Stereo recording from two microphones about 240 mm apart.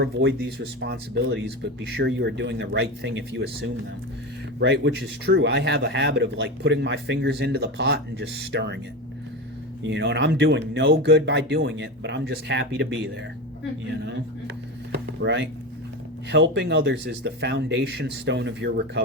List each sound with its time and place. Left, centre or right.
0.0 s speech: right
4.6 s speech: right
9.8 s speech: right
14.9 s a sound: right
16.3 s speech: right